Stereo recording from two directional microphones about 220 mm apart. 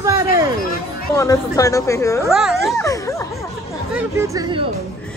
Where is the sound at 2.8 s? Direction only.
15° left (ahead or behind).